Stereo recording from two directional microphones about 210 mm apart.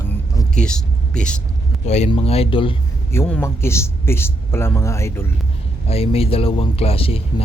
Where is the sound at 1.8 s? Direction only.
35° left (ahead or behind).